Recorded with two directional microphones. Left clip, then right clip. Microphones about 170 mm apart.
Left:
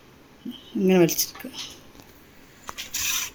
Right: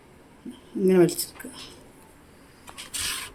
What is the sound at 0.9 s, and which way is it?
Speech, 15° left (ahead or behind).